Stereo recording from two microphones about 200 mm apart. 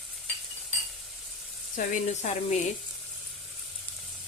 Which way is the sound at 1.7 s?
40° left (ahead or behind).